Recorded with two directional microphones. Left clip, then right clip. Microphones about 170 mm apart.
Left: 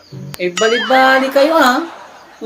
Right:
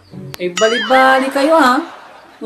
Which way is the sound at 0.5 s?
Centre (ahead or behind).